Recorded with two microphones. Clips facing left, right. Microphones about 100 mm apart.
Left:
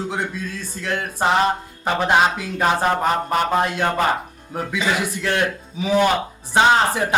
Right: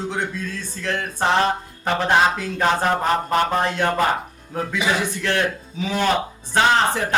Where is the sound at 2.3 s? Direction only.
10° left (ahead or behind).